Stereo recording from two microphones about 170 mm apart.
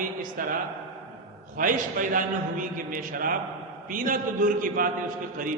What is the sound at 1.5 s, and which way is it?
A man's voice, 50° right (ahead or behind).